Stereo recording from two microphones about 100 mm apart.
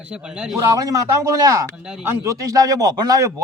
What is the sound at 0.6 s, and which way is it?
A man's voice, 35° right (ahead or behind).